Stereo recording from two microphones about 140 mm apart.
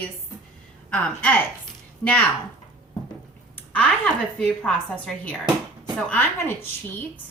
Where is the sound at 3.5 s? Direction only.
10° left (ahead or behind).